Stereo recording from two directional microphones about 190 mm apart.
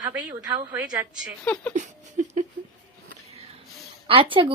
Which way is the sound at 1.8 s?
40° right (ahead or behind).